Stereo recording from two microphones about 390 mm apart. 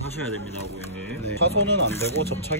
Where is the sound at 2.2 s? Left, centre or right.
Right.